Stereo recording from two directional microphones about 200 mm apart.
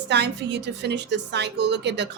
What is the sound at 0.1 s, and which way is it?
Music, 60° right (ahead or behind).